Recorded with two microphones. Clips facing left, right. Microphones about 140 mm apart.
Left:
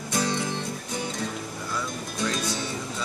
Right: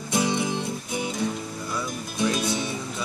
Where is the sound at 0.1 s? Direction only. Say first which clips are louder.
Right 3 dB; 15° right (ahead or behind).